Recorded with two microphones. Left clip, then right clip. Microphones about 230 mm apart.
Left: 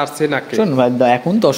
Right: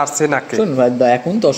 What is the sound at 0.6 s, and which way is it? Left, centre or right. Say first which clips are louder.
Speech: even; left.